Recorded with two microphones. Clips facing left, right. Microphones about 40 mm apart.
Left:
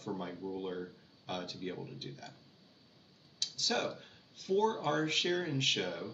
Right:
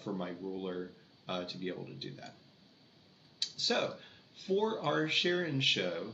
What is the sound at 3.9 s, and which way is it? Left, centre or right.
Speech, centre.